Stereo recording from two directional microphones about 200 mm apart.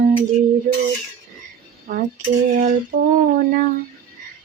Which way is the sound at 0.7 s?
40° right (ahead or behind).